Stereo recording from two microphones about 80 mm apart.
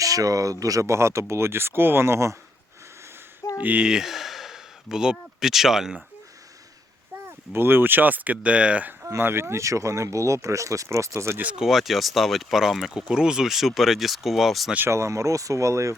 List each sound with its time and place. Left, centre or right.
0.0 s speech: right
3.6 s speech: right
3.8 s speech: centre
7.3 s speech: right
9.0 s speech: right
11.4 s speech: centre
14.8 s speech: right